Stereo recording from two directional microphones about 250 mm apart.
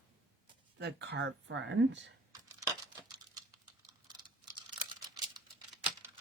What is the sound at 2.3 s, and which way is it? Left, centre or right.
Computer keyboard, centre.